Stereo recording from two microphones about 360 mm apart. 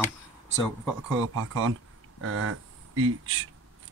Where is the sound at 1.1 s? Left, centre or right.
Right.